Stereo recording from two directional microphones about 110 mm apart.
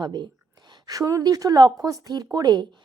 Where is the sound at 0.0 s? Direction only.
40° right (ahead or behind).